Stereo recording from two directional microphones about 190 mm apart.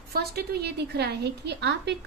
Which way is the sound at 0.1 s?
55° right (ahead or behind).